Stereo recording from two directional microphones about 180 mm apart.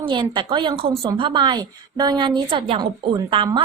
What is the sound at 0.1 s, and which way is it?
A woman's voice, 25° right (ahead or behind).